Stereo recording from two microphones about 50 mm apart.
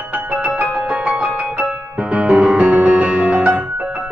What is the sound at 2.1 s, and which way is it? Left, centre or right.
Music, right.